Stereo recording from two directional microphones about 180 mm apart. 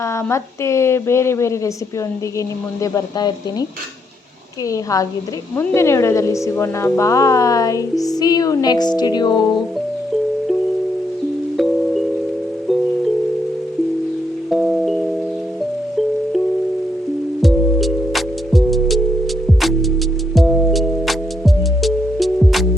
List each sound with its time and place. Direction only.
0.0 s a woman's voice: 15° left (ahead or behind)
2.8 s speech: 20° left (ahead or behind)
4.7 s speech: 20° left (ahead or behind)
11.5 s music: centre (ahead or behind)
14.5 s music: centre (ahead or behind)
17.4 s music: centre (ahead or behind)
20.3 s music: centre (ahead or behind)